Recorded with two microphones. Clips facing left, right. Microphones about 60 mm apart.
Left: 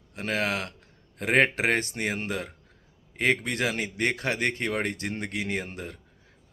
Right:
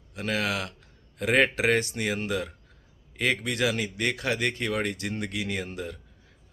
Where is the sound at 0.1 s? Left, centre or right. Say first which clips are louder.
Even; left.